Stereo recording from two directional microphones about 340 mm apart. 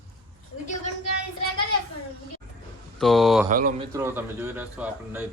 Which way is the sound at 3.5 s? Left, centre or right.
Right.